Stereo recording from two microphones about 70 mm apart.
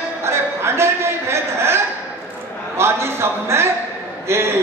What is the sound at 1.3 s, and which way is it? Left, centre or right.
Speech, right.